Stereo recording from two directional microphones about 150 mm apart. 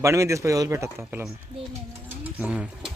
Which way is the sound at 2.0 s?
10° right (ahead or behind).